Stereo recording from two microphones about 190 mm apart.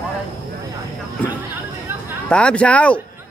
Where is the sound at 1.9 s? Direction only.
10° right (ahead or behind).